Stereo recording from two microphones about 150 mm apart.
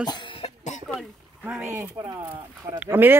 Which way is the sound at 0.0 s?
30° left (ahead or behind).